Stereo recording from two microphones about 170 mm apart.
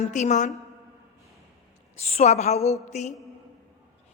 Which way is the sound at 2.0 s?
40° left (ahead or behind).